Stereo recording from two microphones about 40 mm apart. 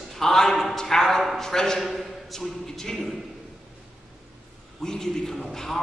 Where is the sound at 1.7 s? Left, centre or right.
Centre.